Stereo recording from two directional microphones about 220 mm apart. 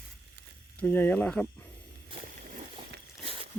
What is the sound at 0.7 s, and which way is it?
Speech, 10° left (ahead or behind).